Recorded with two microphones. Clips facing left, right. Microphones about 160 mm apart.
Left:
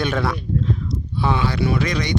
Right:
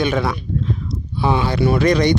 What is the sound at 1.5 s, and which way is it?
Speech, 45° right (ahead or behind).